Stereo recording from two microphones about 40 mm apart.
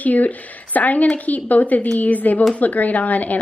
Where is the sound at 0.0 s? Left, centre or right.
Left.